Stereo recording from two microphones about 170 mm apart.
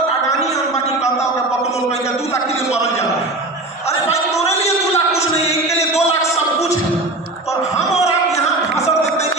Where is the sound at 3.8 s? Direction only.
40° left (ahead or behind).